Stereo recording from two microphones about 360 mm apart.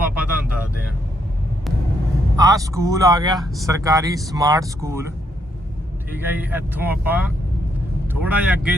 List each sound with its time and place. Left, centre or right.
0.0 s vehicle: centre
2.3 s speech: centre
6.1 s speech: centre